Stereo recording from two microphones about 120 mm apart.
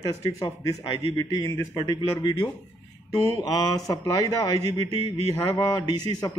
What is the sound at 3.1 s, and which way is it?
Speech, 30° left (ahead or behind).